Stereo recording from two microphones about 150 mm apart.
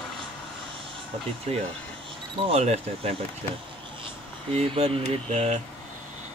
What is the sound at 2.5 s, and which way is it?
Speech, 45° right (ahead or behind).